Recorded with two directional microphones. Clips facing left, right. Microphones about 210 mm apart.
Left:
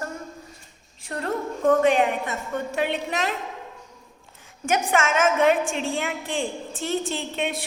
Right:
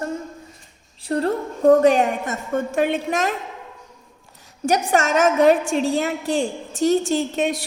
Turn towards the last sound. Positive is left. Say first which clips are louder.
# right 6 dB
turn(degrees=-40)  # may be behind; listen again after turning